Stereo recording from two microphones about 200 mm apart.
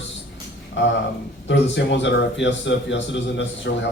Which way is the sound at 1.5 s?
60° left (ahead or behind).